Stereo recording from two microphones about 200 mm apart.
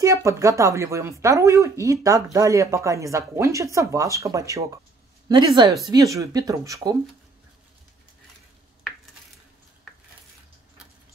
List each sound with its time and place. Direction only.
0.0 s a woman's voice: 15° right (ahead or behind)